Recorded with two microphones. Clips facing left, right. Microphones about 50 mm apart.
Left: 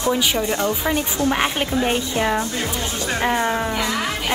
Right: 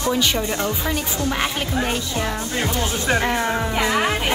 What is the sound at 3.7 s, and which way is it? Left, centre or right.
Speech, right.